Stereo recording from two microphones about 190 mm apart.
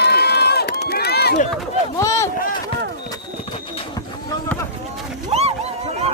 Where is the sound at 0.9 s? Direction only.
55° left (ahead or behind).